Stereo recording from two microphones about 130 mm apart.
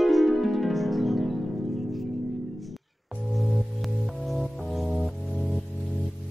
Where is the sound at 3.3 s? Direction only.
Centre (ahead or behind).